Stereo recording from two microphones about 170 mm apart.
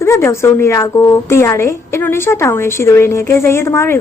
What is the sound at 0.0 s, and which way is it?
A woman's voice, 15° left (ahead or behind).